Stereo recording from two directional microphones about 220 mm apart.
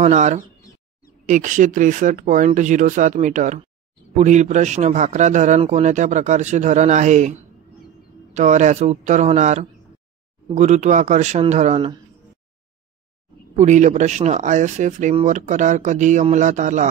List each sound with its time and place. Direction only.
0.0 s speech: 30° right (ahead or behind)
13.6 s speech: 35° right (ahead or behind)